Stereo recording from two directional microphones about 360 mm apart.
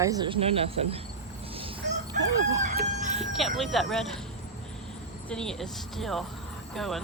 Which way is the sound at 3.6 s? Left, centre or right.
Centre.